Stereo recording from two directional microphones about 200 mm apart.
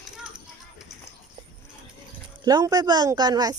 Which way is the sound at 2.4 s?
20° right (ahead or behind).